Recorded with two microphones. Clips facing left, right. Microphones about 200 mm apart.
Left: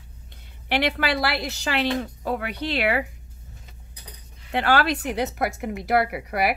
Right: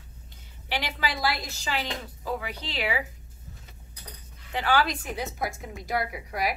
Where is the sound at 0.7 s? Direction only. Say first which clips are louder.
Left 8 dB; 65° left (ahead or behind).